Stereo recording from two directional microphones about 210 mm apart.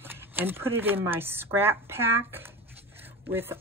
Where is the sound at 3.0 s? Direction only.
10° right (ahead or behind).